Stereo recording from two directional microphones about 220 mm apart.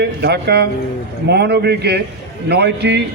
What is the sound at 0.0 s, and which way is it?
A man's voice, 50° right (ahead or behind).